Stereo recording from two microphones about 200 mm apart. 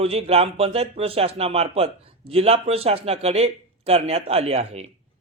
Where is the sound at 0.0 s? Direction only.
30° right (ahead or behind).